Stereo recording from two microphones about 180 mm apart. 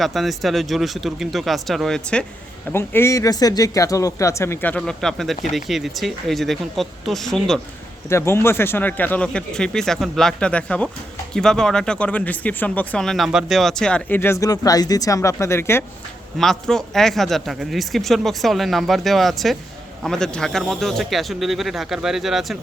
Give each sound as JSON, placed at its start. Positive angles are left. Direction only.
{"t": 0.0, "sound": "speech", "side_deg": 0}
{"t": 8.1, "sound": "speech", "side_deg": 15}
{"t": 16.4, "sound": "speech", "side_deg": 5}